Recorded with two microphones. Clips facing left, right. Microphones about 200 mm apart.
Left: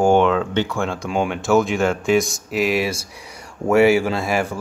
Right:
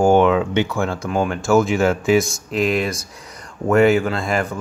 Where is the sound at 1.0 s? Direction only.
15° left (ahead or behind).